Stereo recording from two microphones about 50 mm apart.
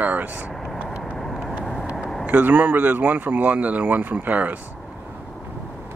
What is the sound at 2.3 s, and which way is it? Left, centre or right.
Speech, right.